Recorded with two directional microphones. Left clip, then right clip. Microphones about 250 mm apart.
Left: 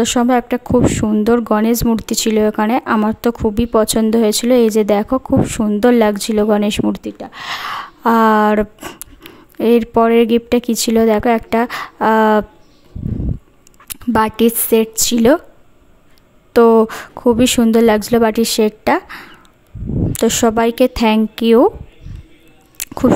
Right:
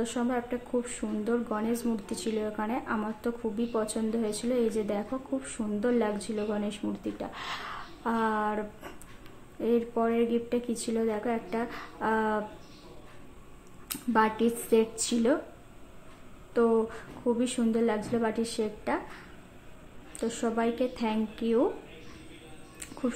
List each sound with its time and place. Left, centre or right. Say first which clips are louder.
0.0 s speech: left 17 dB; left
13.8 s speech: left 11 dB; left
16.5 s speech: left 16 dB; left
22.8 s a sound: left 17 dB; left